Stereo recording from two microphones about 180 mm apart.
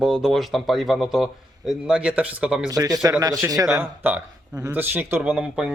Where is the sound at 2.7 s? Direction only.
20° right (ahead or behind).